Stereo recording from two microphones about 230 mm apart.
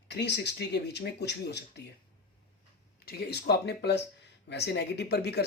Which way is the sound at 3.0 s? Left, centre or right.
Left.